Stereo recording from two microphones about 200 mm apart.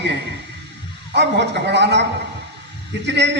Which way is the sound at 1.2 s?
60° right (ahead or behind).